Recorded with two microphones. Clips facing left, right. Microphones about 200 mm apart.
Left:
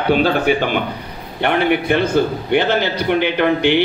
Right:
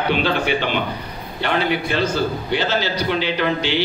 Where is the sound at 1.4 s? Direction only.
60° left (ahead or behind).